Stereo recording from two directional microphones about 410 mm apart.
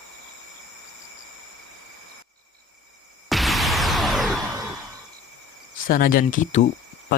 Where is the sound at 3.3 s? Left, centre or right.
Centre.